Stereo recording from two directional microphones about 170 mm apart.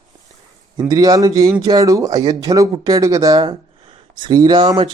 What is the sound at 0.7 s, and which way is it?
Speech, 20° right (ahead or behind).